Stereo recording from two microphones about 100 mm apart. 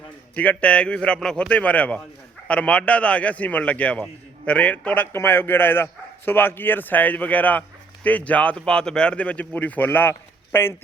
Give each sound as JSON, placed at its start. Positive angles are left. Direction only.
{"t": 0.3, "sound": "a man's voice", "side_deg": 15}